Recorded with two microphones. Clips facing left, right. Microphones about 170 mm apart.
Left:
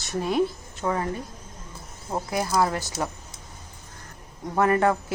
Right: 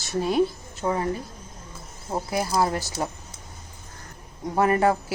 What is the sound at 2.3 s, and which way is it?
Speech, 30° right (ahead or behind).